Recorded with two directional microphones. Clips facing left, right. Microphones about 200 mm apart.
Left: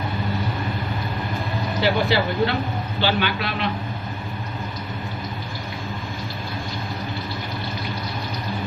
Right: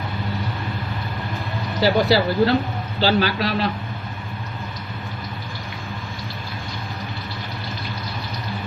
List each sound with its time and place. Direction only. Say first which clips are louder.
1.8 s speech: right 4 dB; 40° right (ahead or behind)